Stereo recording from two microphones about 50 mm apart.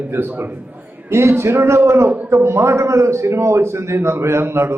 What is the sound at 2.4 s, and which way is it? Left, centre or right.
A man's voice, right.